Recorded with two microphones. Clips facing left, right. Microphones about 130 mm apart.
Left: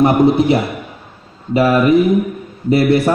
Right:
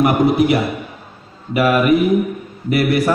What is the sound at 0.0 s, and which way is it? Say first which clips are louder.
A man's voice: left 3 dB; 25° left (ahead or behind).